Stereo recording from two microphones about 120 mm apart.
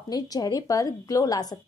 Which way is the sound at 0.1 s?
30° left (ahead or behind).